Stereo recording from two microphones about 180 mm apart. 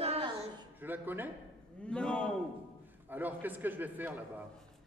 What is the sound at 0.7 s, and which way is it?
Speech, 10° right (ahead or behind).